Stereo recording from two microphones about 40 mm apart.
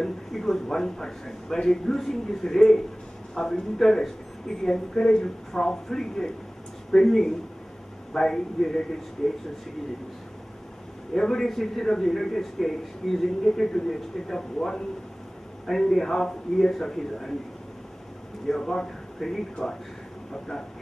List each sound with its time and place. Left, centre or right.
0.0 s a man's voice: centre
11.1 s a man's voice: centre
18.5 s a man's voice: centre